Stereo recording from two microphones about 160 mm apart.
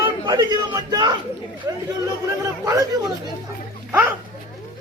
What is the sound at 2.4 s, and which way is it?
Speech, 20° right (ahead or behind).